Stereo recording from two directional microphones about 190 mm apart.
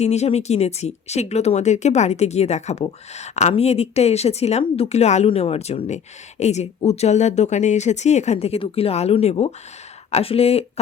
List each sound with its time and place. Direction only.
0.0 s speech: 35° left (ahead or behind)